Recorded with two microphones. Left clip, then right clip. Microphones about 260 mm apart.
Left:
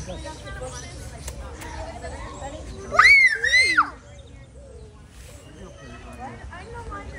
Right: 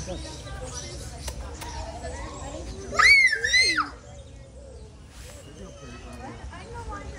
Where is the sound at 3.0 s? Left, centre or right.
Centre.